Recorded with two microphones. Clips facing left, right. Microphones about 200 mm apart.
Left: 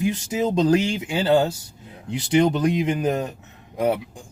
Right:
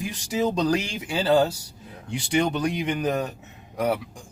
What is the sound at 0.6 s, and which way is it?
Speech, 20° left (ahead or behind).